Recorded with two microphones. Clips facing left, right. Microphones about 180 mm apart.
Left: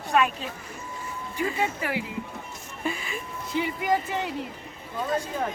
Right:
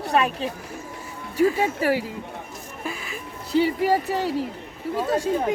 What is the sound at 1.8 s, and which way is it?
Speech, 40° right (ahead or behind).